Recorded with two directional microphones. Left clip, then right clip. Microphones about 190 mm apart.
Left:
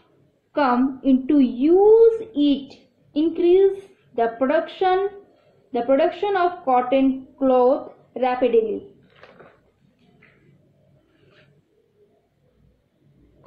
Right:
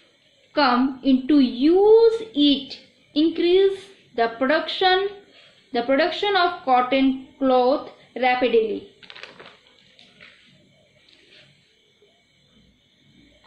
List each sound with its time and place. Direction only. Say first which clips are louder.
0.5 s a woman's voice: right 1 dB; 15° left (ahead or behind)